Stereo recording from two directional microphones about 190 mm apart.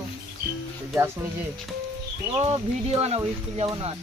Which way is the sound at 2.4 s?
30° right (ahead or behind).